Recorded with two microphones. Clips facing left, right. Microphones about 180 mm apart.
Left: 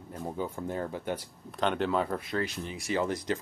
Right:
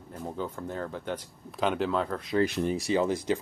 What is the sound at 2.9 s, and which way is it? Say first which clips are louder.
Speech: right 1 dB; 20° right (ahead or behind).